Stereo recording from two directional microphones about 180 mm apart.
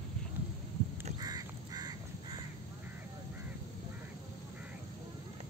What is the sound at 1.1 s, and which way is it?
Crow, 20° right (ahead or behind).